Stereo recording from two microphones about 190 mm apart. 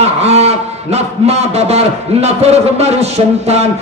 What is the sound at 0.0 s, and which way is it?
A man's voice, 35° right (ahead or behind).